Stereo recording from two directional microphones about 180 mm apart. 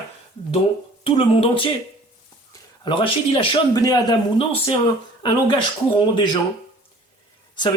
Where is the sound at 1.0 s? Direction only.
30° left (ahead or behind).